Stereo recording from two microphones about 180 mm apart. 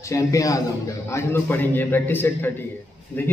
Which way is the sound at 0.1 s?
20° left (ahead or behind).